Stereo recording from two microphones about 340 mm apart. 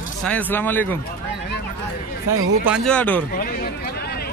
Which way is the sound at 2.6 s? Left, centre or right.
Centre.